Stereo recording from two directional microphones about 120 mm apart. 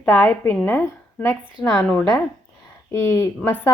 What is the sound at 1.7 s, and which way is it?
Speech, 10° left (ahead or behind).